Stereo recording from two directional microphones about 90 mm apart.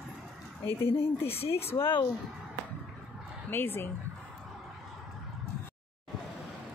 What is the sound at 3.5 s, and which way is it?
Speech, 25° left (ahead or behind).